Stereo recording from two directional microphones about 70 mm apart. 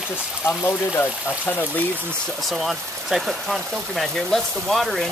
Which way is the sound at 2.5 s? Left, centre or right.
Centre.